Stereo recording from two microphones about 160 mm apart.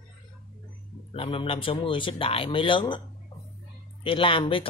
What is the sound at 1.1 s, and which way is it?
Speech, 35° left (ahead or behind).